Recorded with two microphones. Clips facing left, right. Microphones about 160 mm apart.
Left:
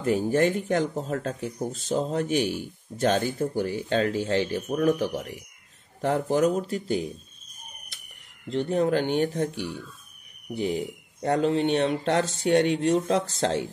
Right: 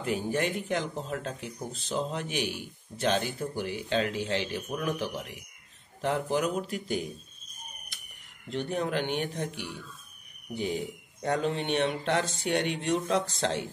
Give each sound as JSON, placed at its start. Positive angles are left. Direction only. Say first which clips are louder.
{"t": 0.0, "sound": "speech", "louder": "left 7 dB", "side_deg": 45}
{"t": 8.5, "sound": "speech", "louder": "left 7 dB", "side_deg": 30}